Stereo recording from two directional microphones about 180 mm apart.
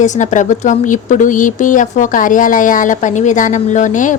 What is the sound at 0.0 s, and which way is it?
A woman's voice, 40° left (ahead or behind).